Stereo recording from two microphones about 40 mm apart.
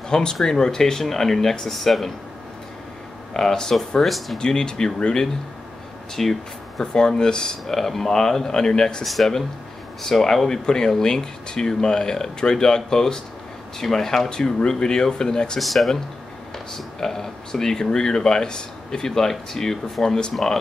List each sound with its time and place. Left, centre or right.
0.1 s speech: centre
3.3 s speech: centre
4.4 s speech: centre
6.2 s speech: centre
6.8 s speech: centre
7.6 s speech: centre
9.0 s speech: centre
15.6 s speech: centre